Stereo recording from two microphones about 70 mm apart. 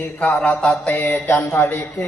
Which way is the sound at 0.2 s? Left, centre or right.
Centre.